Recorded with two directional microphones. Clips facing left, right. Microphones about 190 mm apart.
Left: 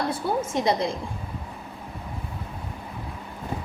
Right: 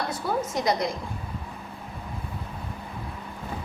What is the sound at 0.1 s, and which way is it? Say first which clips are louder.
Speech: left 2 dB; 25° left (ahead or behind).